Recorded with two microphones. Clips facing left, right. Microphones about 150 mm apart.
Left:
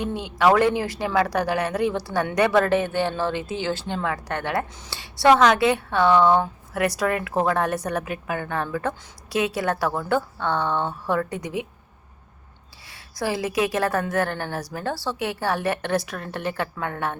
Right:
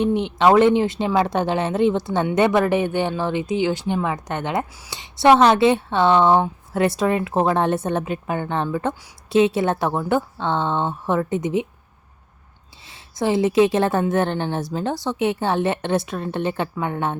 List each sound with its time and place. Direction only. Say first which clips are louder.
0.0 s speech: right 4 dB; 20° right (ahead or behind)
12.9 s speech: right 6 dB; 20° right (ahead or behind)